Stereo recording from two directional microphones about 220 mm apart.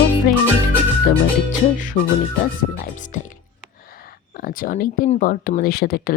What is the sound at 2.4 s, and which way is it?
Music, 35° left (ahead or behind).